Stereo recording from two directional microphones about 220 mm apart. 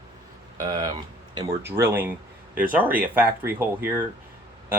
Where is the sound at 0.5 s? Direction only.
15° right (ahead or behind).